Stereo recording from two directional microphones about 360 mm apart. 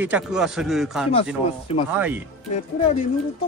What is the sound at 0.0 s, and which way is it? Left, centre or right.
Speech, centre.